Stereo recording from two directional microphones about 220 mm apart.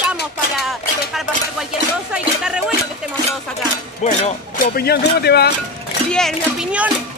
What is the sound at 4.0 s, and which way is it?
Speech, 30° left (ahead or behind).